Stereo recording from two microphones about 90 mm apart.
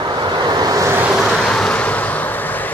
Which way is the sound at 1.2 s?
5° left (ahead or behind).